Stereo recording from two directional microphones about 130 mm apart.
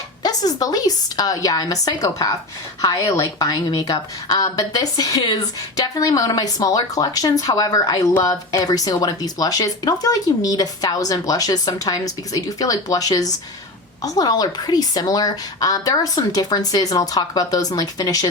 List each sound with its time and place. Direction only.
0.2 s speech: 30° left (ahead or behind)